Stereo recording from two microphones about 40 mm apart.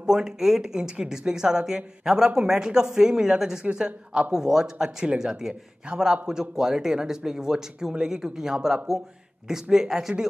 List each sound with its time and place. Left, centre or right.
0.0 s speech: centre